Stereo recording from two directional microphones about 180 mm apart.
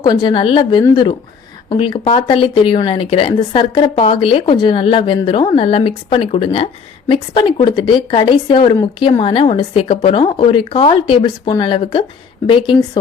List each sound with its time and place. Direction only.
0.0 s speech: 25° left (ahead or behind)